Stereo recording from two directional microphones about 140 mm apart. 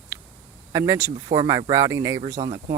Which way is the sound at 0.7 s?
25° right (ahead or behind).